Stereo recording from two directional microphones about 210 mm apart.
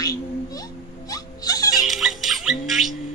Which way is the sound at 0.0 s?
15° left (ahead or behind).